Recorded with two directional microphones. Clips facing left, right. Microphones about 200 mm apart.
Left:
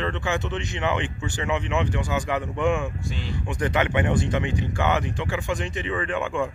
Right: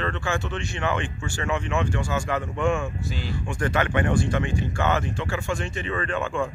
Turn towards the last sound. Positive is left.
turn(degrees=15)  # may be behind; listen again after turning